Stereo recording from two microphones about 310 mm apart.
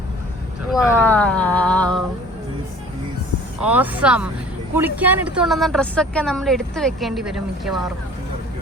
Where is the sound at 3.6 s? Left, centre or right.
Centre.